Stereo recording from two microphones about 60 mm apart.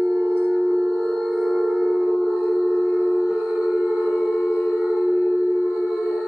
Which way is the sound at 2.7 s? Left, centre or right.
Centre.